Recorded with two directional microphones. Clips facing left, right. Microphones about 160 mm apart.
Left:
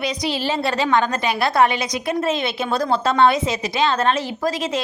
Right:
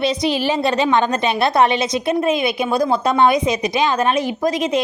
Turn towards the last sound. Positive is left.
turn(degrees=-15)  # may be behind; listen again after turning